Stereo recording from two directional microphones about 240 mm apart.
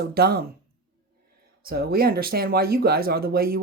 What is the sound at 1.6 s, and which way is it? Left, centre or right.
Speech, right.